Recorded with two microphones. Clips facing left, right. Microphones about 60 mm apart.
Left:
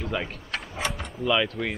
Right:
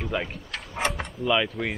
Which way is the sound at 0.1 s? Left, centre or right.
Centre.